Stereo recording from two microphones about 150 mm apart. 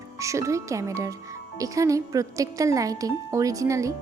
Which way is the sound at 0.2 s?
20° right (ahead or behind).